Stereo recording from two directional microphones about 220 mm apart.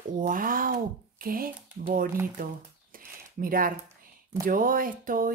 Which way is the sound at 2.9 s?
40° right (ahead or behind).